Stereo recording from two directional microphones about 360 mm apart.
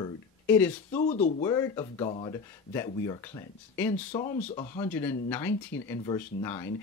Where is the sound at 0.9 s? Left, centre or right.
Centre.